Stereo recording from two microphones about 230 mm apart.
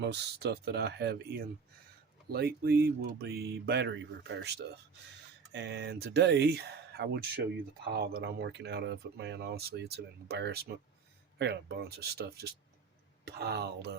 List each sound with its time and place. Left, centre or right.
0.0 s speech: right
5.5 s speech: right